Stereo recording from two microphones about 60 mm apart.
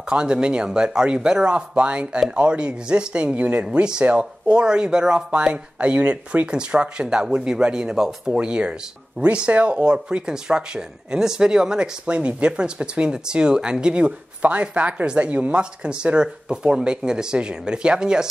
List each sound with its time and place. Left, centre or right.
0.1 s speech: centre